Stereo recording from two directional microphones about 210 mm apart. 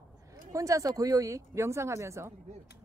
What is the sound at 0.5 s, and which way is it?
Speech, 15° right (ahead or behind).